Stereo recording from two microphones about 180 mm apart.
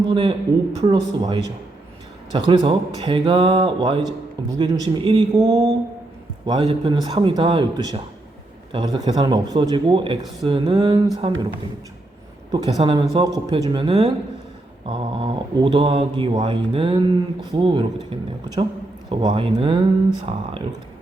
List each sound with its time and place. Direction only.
0.1 s speech: 30° right (ahead or behind)
2.5 s speech: 25° right (ahead or behind)
12.5 s speech: 20° right (ahead or behind)